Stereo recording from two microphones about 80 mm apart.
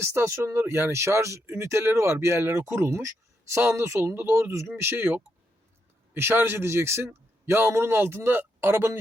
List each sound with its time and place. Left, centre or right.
0.0 s a man's voice: right